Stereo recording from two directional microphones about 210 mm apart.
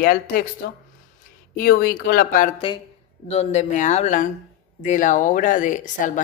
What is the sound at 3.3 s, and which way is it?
Speech, 30° left (ahead or behind).